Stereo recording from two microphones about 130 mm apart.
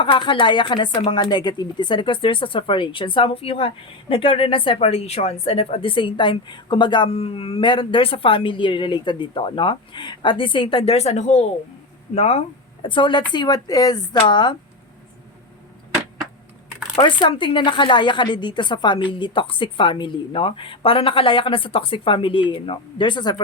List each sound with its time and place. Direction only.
0.0 s a woman's voice: 40° left (ahead or behind); by 12.4 s 55° left (ahead or behind)
12.8 s speech: 40° left (ahead or behind)
17.0 s speech: 40° left (ahead or behind)